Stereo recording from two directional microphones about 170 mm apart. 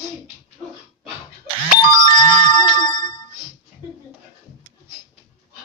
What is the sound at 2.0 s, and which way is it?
Ringtone, 25° left (ahead or behind).